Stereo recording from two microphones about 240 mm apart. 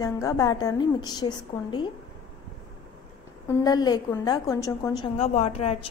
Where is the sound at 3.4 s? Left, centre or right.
Centre.